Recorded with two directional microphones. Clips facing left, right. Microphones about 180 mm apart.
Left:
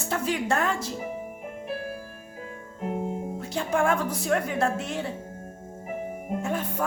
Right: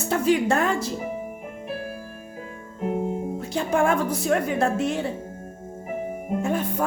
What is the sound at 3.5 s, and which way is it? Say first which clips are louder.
A woman's voice: right 3 dB; 20° right (ahead or behind).